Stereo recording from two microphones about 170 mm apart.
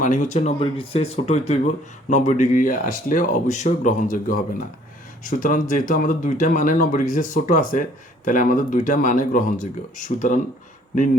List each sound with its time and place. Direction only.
0.0 s speech: 45° left (ahead or behind)